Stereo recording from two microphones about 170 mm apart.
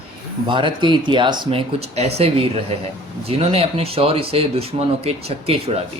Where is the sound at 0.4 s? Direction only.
30° right (ahead or behind).